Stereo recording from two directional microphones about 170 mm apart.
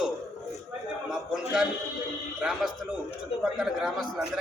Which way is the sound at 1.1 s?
5° right (ahead or behind).